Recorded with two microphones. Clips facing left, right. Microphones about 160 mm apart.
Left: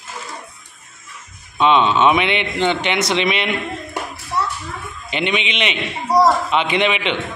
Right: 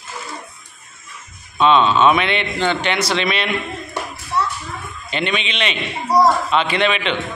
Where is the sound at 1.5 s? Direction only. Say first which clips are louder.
Right 1 dB; 15° left (ahead or behind).